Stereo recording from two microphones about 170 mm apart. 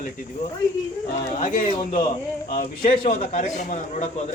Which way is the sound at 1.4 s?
50° left (ahead or behind).